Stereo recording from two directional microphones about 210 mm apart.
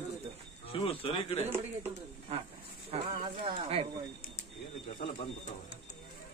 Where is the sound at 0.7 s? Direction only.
25° left (ahead or behind).